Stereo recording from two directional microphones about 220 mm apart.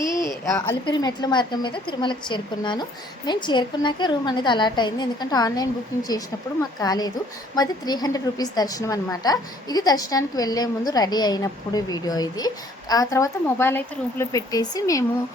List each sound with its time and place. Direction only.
0.5 s a woman's voice: 15° left (ahead or behind)